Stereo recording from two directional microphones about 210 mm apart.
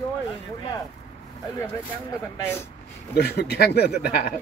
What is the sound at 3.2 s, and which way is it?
Speech, 50° left (ahead or behind).